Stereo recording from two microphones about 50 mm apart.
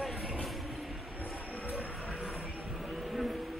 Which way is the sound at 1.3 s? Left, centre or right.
Left.